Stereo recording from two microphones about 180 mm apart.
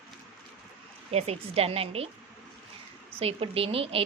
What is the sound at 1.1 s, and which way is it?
Speech, 35° right (ahead or behind).